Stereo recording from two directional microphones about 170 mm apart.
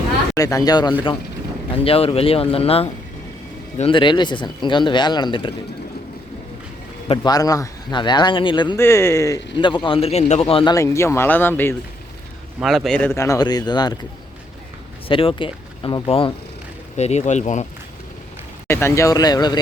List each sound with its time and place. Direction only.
0.3 s speech: 20° left (ahead or behind)
1.7 s speech: 35° left (ahead or behind)
7.2 s speech: 20° left (ahead or behind)
8.7 s speech: 15° left (ahead or behind); by 10.8 s 30° left (ahead or behind)
10.8 s speech: 15° left (ahead or behind)
12.5 s a man's voice: centre (ahead or behind)
13.1 s speech: 15° left (ahead or behind)
15.0 s speech: 30° left (ahead or behind)
18.7 s speech: 15° left (ahead or behind)